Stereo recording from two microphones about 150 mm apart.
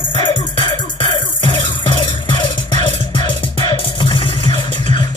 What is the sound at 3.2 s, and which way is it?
Music, 35° left (ahead or behind).